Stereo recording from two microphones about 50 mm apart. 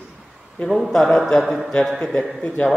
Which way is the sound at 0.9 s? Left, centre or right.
Centre.